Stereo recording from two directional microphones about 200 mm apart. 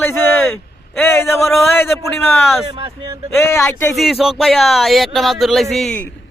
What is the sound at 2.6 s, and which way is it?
Speech, 25° right (ahead or behind).